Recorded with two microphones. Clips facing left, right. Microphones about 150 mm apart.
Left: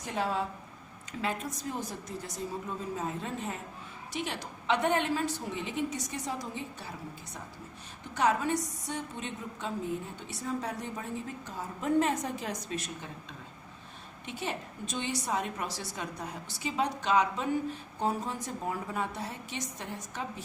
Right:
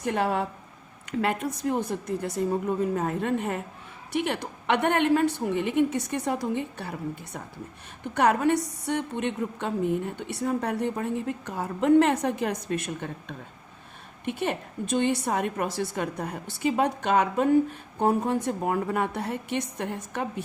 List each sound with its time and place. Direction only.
0.0 s a woman's voice: 60° right (ahead or behind)